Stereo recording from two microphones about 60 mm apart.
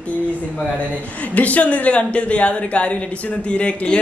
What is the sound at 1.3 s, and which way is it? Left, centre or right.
Speech, left.